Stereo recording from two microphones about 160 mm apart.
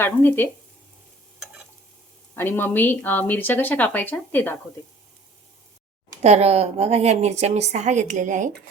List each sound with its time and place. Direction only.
0.0 s speech: 15° left (ahead or behind)
2.3 s speech: 15° left (ahead or behind)
6.2 s a woman's voice: 40° right (ahead or behind)